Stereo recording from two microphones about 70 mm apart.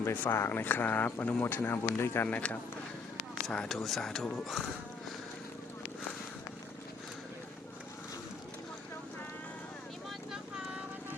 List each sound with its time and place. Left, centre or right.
0.0 s speech: left
2.2 s speech: left
3.4 s speech: centre